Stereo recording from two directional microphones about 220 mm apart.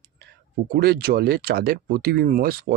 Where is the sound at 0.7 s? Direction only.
45° right (ahead or behind).